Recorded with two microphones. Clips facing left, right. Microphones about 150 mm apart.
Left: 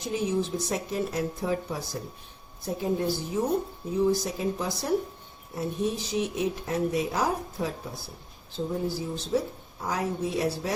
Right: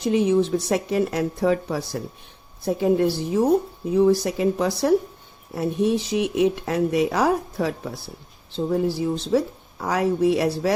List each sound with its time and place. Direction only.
0.0 s speech: 70° right (ahead or behind)